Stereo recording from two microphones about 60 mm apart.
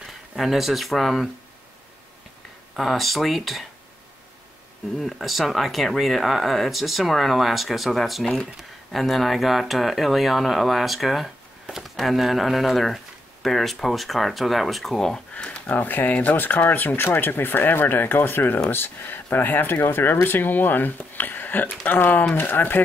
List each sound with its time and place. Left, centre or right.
0.4 s speech: centre
2.7 s speech: centre
4.9 s speech: centre
15.3 s a sound: centre
15.7 s speech: left